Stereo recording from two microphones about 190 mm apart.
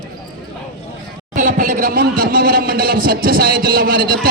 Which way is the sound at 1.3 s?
45° right (ahead or behind).